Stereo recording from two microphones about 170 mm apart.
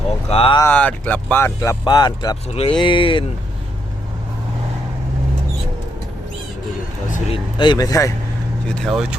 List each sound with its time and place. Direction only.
0.3 s speech: 35° left (ahead or behind)
0.6 s speech: 10° left (ahead or behind); by 3.2 s 30° left (ahead or behind)
7.3 s speech: 30° left (ahead or behind)
8.8 s speech: centre (ahead or behind)